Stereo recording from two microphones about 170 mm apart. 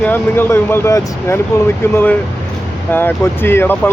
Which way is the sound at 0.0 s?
10° left (ahead or behind).